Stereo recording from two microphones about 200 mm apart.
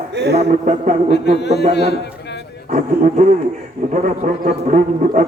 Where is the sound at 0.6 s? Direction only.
35° right (ahead or behind).